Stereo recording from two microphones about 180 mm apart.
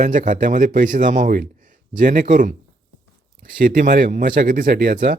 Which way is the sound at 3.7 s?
55° right (ahead or behind).